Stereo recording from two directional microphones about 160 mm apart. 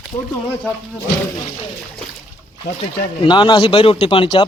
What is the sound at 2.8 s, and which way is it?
Speech, 30° left (ahead or behind).